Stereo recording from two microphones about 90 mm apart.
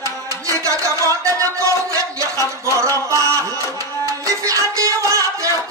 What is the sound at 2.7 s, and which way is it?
Speech, 35° right (ahead or behind).